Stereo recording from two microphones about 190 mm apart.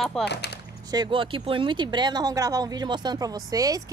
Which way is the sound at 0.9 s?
25° right (ahead or behind).